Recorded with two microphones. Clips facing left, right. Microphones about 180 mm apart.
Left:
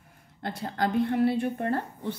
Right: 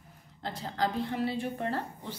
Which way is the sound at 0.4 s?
60° left (ahead or behind).